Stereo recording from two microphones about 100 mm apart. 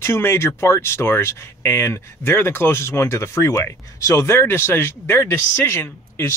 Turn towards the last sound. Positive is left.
turn(degrees=25)  # may be behind; listen again after turning